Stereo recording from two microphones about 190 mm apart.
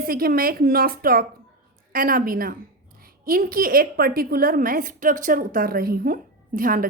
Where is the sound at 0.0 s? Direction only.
50° right (ahead or behind).